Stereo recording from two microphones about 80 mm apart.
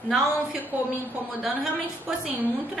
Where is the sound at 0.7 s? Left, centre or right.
Right.